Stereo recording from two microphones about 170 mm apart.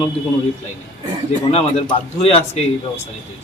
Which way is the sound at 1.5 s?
35° left (ahead or behind).